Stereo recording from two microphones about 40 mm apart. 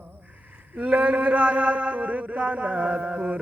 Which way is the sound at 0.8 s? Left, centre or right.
Right.